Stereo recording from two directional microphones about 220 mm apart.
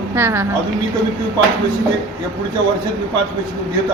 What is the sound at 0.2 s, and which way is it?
Speech, 10° right (ahead or behind).